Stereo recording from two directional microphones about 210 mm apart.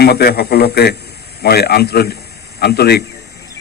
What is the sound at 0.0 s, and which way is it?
A man's voice, 50° left (ahead or behind).